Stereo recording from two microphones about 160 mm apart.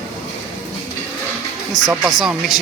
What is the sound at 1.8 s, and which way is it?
Speech, 25° left (ahead or behind).